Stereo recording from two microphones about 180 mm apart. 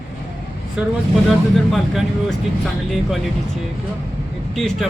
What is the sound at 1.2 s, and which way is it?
A man's voice, centre (ahead or behind).